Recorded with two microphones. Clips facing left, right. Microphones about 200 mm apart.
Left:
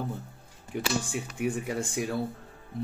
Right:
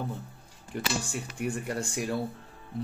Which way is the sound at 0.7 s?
5° left (ahead or behind).